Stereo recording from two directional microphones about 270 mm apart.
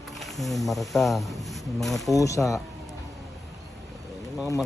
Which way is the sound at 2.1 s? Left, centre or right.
Centre.